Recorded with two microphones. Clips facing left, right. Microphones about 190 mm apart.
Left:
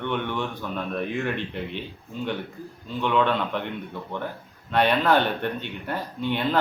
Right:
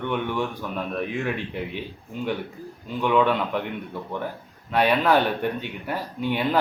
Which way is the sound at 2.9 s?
10° right (ahead or behind).